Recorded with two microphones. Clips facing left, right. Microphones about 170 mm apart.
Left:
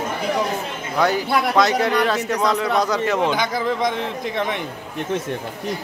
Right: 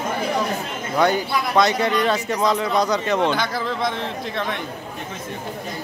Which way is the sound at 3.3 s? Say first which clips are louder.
Left 2 dB; 15° left (ahead or behind).